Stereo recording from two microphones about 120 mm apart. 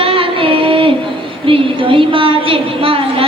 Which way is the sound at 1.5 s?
45° right (ahead or behind).